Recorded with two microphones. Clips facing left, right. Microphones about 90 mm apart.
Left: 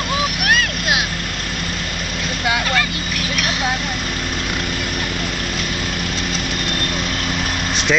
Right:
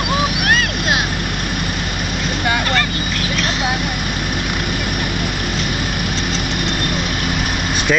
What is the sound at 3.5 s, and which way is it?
Vehicle, 15° right (ahead or behind).